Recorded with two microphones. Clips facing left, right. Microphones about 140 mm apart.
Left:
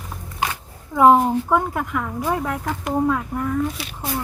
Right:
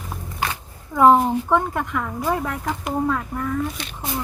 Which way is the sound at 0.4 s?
15° left (ahead or behind).